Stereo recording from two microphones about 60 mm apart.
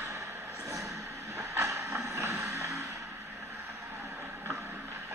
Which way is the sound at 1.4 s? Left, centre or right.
Right.